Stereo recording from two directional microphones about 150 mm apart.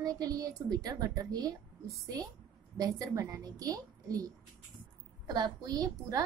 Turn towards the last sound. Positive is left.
turn(degrees=-25)  # may be behind; listen again after turning